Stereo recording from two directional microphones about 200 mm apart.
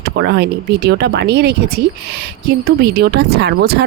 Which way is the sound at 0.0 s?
55° right (ahead or behind).